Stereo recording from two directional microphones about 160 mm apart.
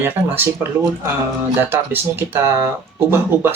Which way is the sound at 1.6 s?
15° right (ahead or behind).